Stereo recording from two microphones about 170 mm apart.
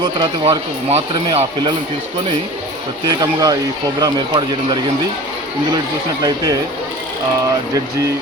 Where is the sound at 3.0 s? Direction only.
20° right (ahead or behind).